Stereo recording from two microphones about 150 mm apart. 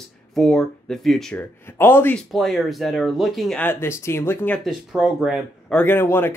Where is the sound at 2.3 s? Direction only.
Centre (ahead or behind).